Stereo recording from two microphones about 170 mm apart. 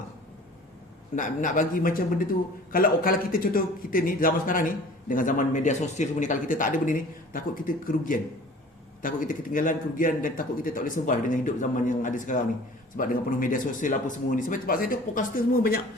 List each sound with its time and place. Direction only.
1.1 s a man's voice: 50° left (ahead or behind)